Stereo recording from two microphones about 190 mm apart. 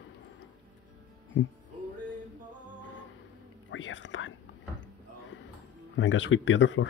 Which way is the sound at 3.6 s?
80° left.